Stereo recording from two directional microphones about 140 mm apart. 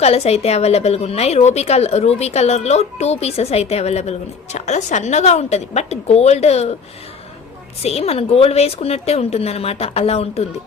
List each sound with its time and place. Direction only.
0.0 s a woman's voice: 50° left (ahead or behind)
7.8 s a woman's voice: 45° left (ahead or behind)